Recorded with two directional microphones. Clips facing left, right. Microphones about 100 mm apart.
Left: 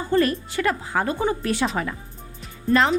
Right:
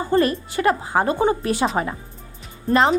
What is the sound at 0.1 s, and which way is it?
Speech, 30° right (ahead or behind).